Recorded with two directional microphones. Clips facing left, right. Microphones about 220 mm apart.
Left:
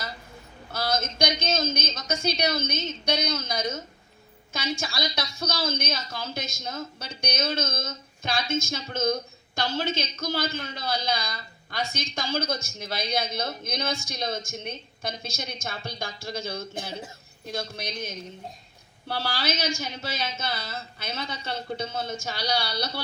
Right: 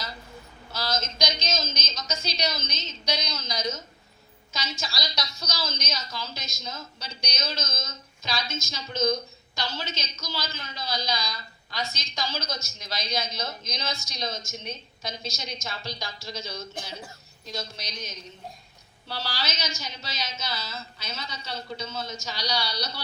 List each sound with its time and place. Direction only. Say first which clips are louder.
0.7 s a woman's voice: left 3 dB; 55° left (ahead or behind)